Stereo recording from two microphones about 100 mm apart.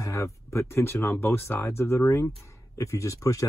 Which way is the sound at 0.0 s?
30° left (ahead or behind).